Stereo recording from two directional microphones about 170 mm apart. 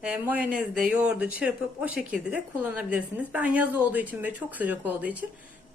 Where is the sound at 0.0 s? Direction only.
5° right (ahead or behind).